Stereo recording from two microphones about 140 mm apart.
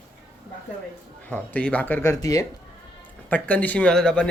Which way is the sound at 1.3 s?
10° left (ahead or behind).